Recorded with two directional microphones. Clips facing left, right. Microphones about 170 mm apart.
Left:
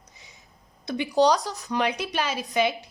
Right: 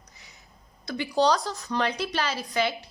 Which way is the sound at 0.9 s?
15° left (ahead or behind).